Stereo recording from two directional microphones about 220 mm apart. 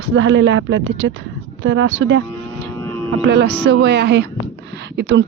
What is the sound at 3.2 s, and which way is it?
Speech, 50° right (ahead or behind).